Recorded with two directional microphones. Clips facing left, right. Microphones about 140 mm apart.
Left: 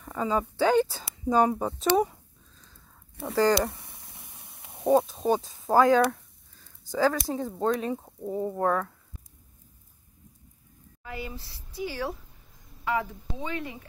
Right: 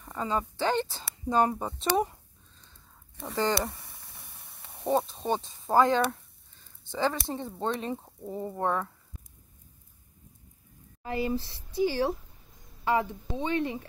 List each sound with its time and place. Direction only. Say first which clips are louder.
0.0 s speech: left 3 dB; 5° left (ahead or behind)
3.2 s speech: left 6 dB; 5° left (ahead or behind)
3.7 s a sound: left 1 dB; 20° left (ahead or behind)
4.8 s speech: left 5 dB; centre (ahead or behind)
11.0 s speech: right 8 dB; 35° right (ahead or behind)